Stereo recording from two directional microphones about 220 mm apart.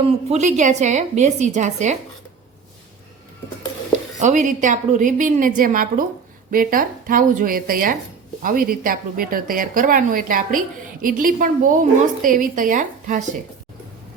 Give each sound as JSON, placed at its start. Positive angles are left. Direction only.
{"t": 0.3, "sound": "a woman's voice", "side_deg": -30}
{"t": 4.2, "sound": "a woman's voice", "side_deg": -35}